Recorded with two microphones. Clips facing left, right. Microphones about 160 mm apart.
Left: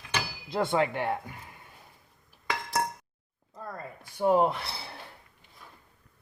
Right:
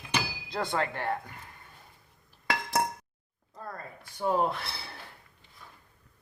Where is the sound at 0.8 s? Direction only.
15° left (ahead or behind).